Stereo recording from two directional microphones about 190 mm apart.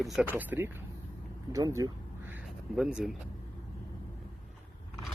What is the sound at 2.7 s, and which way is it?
Speech, 5° right (ahead or behind).